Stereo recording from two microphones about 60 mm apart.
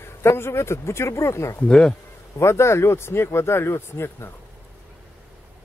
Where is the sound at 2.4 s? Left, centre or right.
Left.